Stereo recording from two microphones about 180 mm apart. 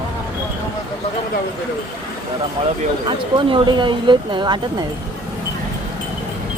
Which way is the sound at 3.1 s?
25° right (ahead or behind).